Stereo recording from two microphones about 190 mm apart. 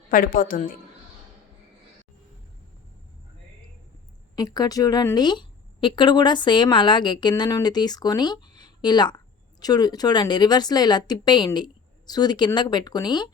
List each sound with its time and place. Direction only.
0.1 s a woman's voice: 45° left (ahead or behind)
4.4 s a woman's voice: 20° left (ahead or behind)